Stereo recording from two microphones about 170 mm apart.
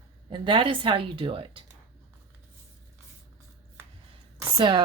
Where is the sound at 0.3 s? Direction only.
30° right (ahead or behind).